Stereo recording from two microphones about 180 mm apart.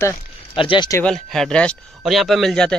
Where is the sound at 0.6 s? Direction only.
25° left (ahead or behind).